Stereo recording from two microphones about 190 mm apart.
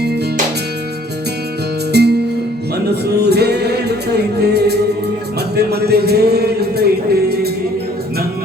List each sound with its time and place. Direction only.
1.9 s music: 60° right (ahead or behind)